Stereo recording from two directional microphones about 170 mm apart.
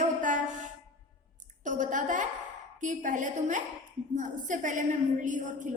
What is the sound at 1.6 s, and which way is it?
A woman's voice, 50° right (ahead or behind).